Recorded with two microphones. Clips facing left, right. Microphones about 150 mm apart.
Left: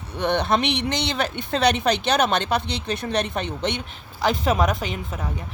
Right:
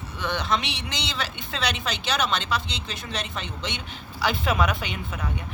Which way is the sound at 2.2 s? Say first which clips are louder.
Left 5 dB; 60° left (ahead or behind).